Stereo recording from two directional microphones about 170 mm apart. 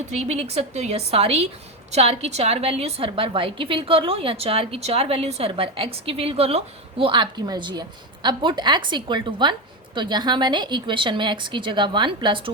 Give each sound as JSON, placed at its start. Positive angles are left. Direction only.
{"t": 0.1, "sound": "a woman's voice", "side_deg": -40}